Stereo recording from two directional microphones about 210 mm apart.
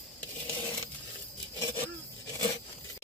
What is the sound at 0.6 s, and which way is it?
Coin, 15° left (ahead or behind).